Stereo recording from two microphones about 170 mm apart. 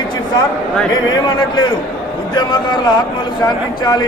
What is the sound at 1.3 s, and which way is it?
Speech, 25° left (ahead or behind).